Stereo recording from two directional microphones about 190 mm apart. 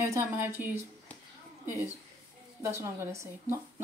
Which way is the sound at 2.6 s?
15° right (ahead or behind).